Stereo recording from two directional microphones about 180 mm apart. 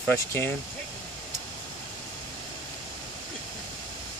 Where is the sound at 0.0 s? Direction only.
10° left (ahead or behind).